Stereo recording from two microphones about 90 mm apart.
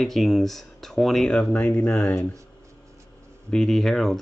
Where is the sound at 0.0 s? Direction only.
Centre (ahead or behind).